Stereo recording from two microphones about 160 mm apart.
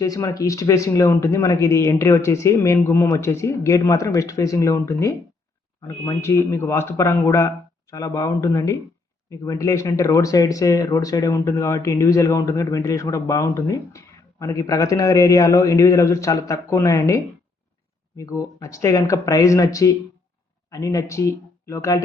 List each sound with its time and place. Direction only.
0.0 s speech: 20° left (ahead or behind)
18.2 s speech: 20° left (ahead or behind)